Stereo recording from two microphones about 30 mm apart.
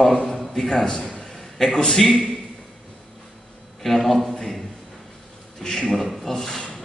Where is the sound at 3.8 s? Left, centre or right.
Centre.